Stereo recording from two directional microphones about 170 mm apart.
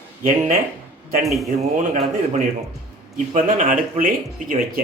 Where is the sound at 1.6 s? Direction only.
40° right (ahead or behind).